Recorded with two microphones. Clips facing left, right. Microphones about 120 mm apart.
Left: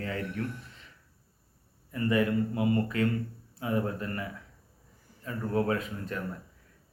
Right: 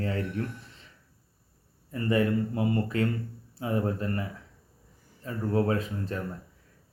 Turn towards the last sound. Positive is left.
turn(degrees=-30)  # may be behind; listen again after turning